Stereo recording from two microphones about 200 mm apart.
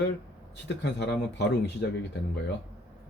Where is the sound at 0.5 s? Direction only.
60° left (ahead or behind).